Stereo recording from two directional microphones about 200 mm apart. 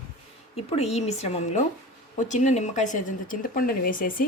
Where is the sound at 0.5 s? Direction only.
30° left (ahead or behind).